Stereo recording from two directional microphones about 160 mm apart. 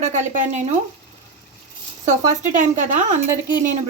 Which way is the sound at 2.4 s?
50° right (ahead or behind).